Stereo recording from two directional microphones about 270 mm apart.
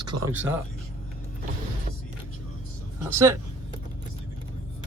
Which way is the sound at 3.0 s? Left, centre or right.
Centre.